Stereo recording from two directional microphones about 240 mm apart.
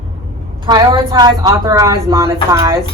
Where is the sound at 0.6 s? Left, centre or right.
Centre.